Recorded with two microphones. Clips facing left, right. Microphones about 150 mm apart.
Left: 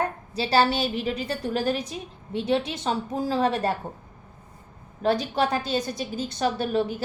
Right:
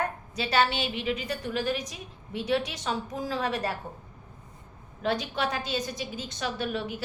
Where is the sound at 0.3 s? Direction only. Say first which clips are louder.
Left 4 dB; 35° left (ahead or behind).